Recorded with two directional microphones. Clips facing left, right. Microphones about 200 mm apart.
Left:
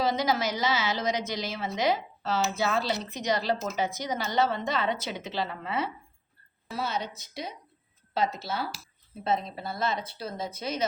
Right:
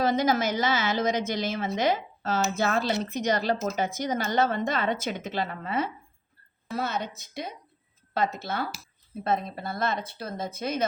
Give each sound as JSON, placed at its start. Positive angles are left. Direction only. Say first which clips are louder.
{"t": 0.0, "sound": "a woman's voice", "louder": "right 3 dB", "side_deg": -50}